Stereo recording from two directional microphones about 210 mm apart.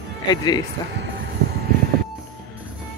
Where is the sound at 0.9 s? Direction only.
55° right (ahead or behind).